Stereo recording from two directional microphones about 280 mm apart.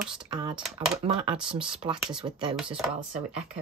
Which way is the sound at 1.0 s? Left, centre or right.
Centre.